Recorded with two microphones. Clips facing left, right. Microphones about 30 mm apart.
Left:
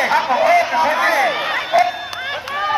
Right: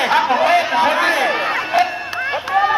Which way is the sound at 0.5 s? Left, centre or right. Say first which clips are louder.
Even; right.